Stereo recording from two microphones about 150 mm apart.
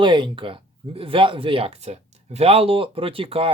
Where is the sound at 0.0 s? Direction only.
30° right (ahead or behind).